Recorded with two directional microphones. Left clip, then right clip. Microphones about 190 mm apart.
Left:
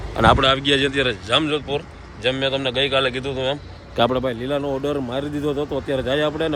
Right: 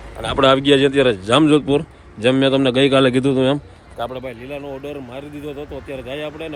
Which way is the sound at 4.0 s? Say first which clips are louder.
Left 7 dB; 70° left (ahead or behind).